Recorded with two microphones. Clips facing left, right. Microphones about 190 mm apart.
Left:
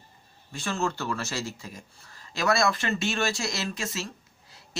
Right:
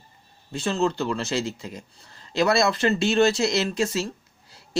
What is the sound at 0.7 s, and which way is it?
A man's voice, 20° right (ahead or behind).